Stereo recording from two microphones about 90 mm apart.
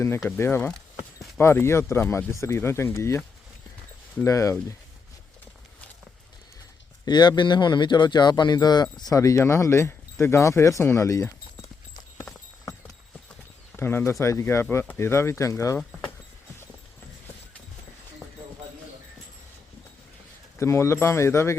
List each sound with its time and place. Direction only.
0.3 s speech: 25° left (ahead or behind)
4.2 s speech: 35° left (ahead or behind)
7.0 s speech: 55° left (ahead or behind)
9.1 s speech: 35° left (ahead or behind)
13.7 s speech: 25° left (ahead or behind)
20.6 s speech: 30° left (ahead or behind)